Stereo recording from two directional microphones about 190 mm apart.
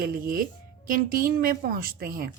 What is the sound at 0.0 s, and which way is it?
A woman's voice, 50° right (ahead or behind).